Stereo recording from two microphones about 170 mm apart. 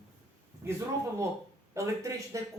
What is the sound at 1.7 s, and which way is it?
Speech, 20° right (ahead or behind).